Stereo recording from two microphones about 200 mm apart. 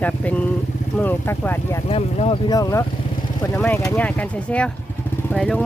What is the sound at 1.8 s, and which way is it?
Speech, 30° left (ahead or behind).